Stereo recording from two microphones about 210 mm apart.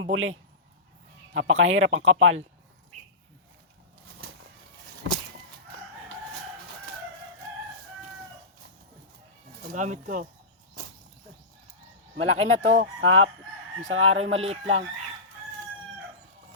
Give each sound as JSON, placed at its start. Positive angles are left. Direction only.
{"t": 0.0, "sound": "speech", "side_deg": -65}
{"t": 9.6, "sound": "speech", "side_deg": -35}
{"t": 12.1, "sound": "speech", "side_deg": -35}
{"t": 12.8, "sound": "speech", "side_deg": -70}
{"t": 14.3, "sound": "chicken", "side_deg": -30}